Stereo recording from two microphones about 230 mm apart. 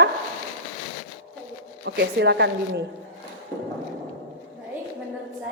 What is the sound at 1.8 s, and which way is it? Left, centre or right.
Speech, right.